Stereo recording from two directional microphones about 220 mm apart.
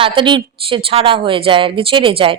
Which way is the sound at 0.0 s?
20° right (ahead or behind).